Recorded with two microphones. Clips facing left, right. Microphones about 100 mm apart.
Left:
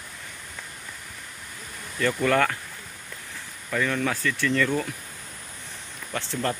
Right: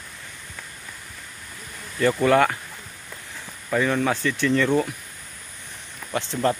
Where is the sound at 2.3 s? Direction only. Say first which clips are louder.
Right 4 dB; 20° right (ahead or behind).